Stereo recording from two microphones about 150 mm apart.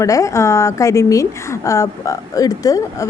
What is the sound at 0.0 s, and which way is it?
A woman's voice, 20° left (ahead or behind).